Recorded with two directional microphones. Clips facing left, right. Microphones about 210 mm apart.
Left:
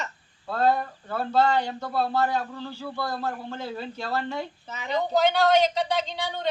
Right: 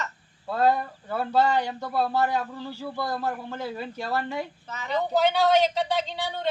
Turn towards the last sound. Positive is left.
turn(degrees=-5)  # may be behind; listen again after turning